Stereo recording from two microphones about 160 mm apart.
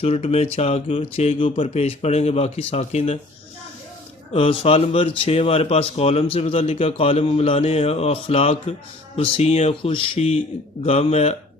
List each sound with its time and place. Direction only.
0.0 s speech: 40° left (ahead or behind)
4.4 s speech: 35° left (ahead or behind)